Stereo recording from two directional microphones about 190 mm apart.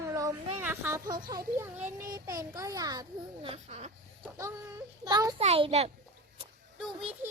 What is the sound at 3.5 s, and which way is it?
Speech, 35° right (ahead or behind).